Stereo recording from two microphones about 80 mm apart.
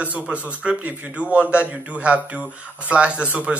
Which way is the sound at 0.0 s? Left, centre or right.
Centre.